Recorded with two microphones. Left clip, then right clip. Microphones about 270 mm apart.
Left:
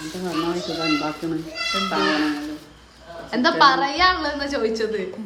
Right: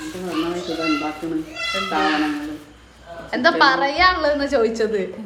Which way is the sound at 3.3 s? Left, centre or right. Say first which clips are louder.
Right 1 dB; centre.